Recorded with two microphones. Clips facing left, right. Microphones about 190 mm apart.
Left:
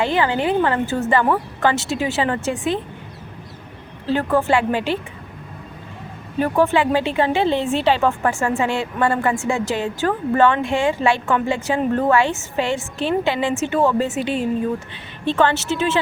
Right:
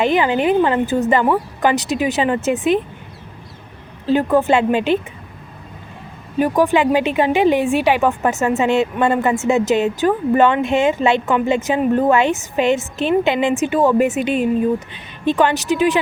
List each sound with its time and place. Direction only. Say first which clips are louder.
0.0 s speech: right 3 dB; 15° right (ahead or behind)
4.0 s speech: right 4 dB; 15° right (ahead or behind)
6.4 s speech: right 2 dB; 15° right (ahead or behind)